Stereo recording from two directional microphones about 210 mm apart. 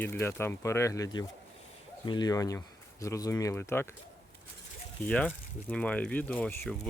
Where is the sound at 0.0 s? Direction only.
10° left (ahead or behind).